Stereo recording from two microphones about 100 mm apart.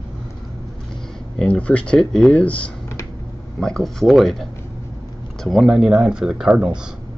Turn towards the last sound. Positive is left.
turn(degrees=-5)  # may be behind; listen again after turning